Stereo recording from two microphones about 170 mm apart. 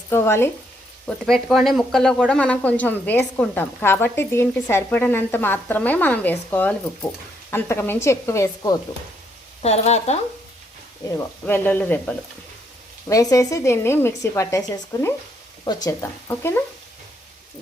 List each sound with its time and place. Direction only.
0.1 s speech: 15° left (ahead or behind)
1.2 s speech: centre (ahead or behind); by 8.7 s 15° left (ahead or behind)
9.6 s speech: 40° left (ahead or behind)
11.4 s speech: 10° left (ahead or behind)